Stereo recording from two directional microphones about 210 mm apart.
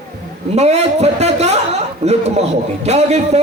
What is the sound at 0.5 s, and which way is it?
A man's voice, 30° right (ahead or behind).